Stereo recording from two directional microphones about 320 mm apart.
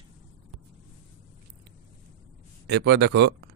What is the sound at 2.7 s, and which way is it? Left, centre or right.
Speech, right.